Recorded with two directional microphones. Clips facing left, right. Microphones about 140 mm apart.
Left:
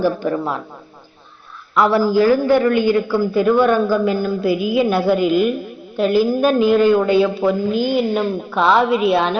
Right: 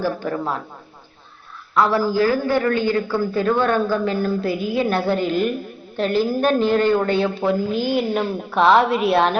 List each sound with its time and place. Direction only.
0.0 s speech: 20° left (ahead or behind)
1.7 s a man's voice: 20° left (ahead or behind); by 9.4 s centre (ahead or behind)